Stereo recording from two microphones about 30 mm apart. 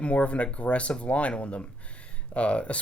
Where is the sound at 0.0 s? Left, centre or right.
Left.